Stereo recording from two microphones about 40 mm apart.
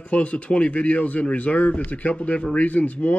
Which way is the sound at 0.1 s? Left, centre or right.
Left.